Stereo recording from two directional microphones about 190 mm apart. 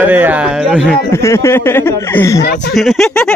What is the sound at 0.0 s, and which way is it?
Speech, 10° right (ahead or behind).